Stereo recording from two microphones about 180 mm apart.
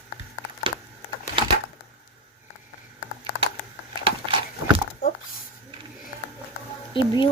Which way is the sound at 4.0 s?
30° right (ahead or behind).